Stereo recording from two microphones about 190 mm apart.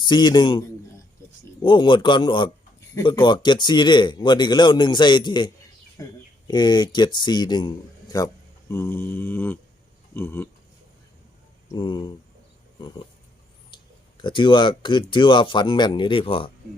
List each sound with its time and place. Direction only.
0.0 s a man's voice: 25° left (ahead or behind)
8.7 s mantra: 10° left (ahead or behind)
11.7 s a man's voice: 25° left (ahead or behind)
14.2 s a man's voice: 25° left (ahead or behind)